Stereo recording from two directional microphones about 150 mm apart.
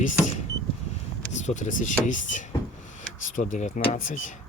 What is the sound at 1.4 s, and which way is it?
Speech, 55° left (ahead or behind).